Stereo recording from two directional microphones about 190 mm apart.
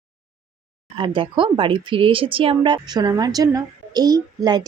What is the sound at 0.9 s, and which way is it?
Speech, 25° right (ahead or behind).